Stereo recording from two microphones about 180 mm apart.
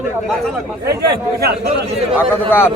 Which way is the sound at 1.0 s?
65° right (ahead or behind).